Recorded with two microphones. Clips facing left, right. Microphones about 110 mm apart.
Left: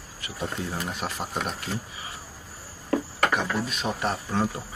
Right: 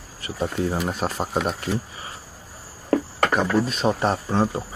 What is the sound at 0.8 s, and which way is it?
Speech, 40° right (ahead or behind).